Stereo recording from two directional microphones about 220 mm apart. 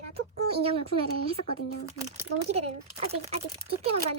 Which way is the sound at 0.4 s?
25° right (ahead or behind).